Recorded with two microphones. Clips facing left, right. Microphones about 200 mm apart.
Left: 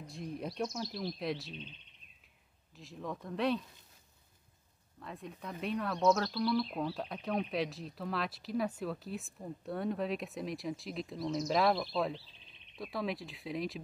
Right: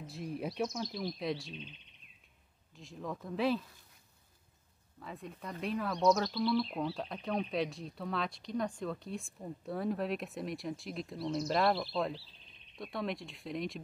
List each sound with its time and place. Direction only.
0.0 s speech: centre (ahead or behind)
2.7 s speech: centre (ahead or behind)
5.0 s speech: centre (ahead or behind)